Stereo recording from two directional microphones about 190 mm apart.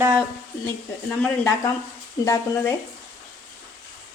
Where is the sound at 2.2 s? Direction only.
15° left (ahead or behind).